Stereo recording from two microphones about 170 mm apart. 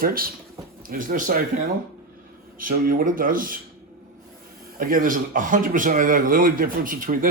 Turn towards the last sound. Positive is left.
turn(degrees=-55)  # may be behind; listen again after turning